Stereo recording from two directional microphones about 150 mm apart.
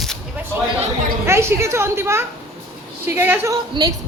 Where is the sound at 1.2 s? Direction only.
15° right (ahead or behind).